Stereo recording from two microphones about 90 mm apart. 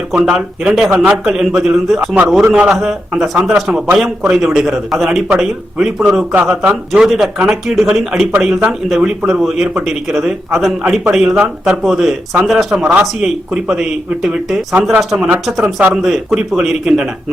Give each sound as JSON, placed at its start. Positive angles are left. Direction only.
{"t": 0.1, "sound": "a man's voice", "side_deg": -5}
{"t": 15.6, "sound": "speech", "side_deg": -15}
{"t": 16.0, "sound": "a man's voice", "side_deg": -5}